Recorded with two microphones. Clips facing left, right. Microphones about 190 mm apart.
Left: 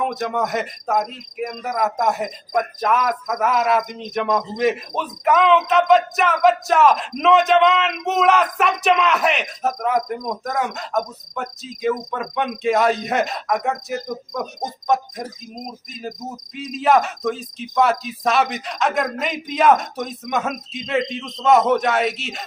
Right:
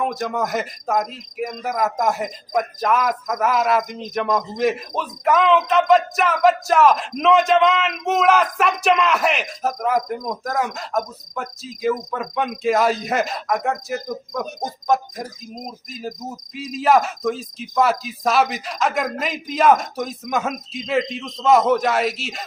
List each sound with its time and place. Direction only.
0.0 s speech: centre (ahead or behind)